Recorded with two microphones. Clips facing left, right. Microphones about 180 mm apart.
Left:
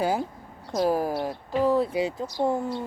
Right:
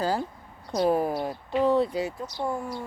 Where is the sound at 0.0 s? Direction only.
10° left (ahead or behind).